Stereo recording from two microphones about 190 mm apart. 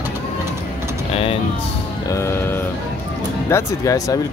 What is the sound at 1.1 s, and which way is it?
Speech, 30° left (ahead or behind).